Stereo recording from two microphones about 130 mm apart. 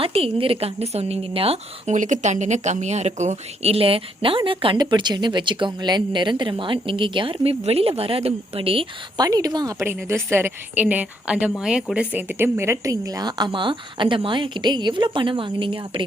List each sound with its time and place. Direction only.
0.0 s speech: 45° right (ahead or behind)
1.9 s speech: 70° right (ahead or behind); by 9.2 s 45° right (ahead or behind)
9.2 s a woman's voice: 30° right (ahead or behind)